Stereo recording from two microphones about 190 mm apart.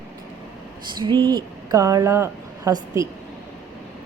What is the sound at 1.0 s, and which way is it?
Speech, 20° right (ahead or behind).